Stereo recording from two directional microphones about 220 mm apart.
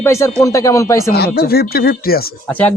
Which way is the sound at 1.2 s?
45° left (ahead or behind).